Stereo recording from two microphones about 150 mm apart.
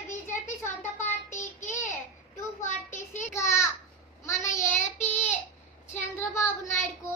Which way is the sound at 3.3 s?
20° left (ahead or behind).